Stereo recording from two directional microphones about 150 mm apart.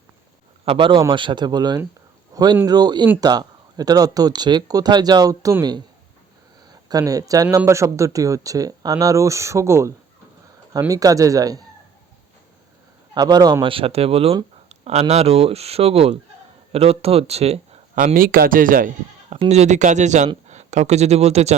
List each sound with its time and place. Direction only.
0.6 s a man's voice: 35° right (ahead or behind)
13.1 s speech: 25° right (ahead or behind); by 17.7 s 45° right (ahead or behind)
17.9 s speech: 70° right (ahead or behind)
19.3 s speech: 45° right (ahead or behind)